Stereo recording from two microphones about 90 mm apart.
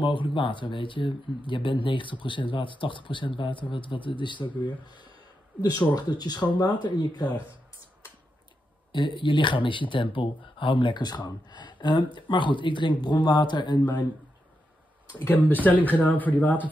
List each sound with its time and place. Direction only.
0.0 s speech: 65° left (ahead or behind)
5.6 s speech: 50° left (ahead or behind)
8.9 s speech: 60° left (ahead or behind)
15.2 s speech: 20° left (ahead or behind)